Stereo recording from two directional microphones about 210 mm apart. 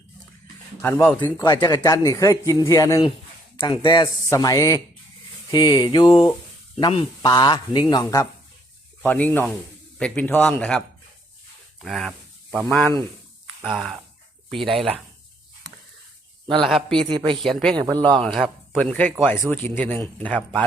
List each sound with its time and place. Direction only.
0.8 s speech: 10° left (ahead or behind)
9.0 s speech: 10° left (ahead or behind)
11.8 s a sound: centre (ahead or behind)
12.6 s speech: 10° left (ahead or behind)
13.6 s speech: centre (ahead or behind)
16.6 s speech: centre (ahead or behind)
17.1 s speech: 20° right (ahead or behind)
17.3 s speech: centre (ahead or behind)
17.7 s speech: 20° right (ahead or behind)
18.1 s speech: centre (ahead or behind)